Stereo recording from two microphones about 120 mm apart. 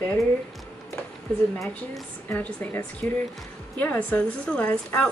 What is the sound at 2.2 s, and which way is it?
A woman's voice, 15° left (ahead or behind).